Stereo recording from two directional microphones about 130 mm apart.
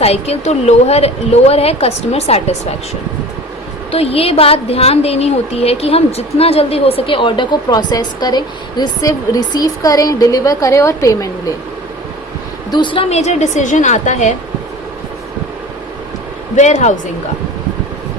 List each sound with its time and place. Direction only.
0.0 s a woman's voice: 55° left (ahead or behind)
3.9 s a woman's voice: 50° left (ahead or behind); by 11.3 s 25° left (ahead or behind)
12.7 s a woman's voice: 40° left (ahead or behind)
13.1 s a woman's voice: 60° left (ahead or behind)
16.6 s a woman's voice: 65° left (ahead or behind)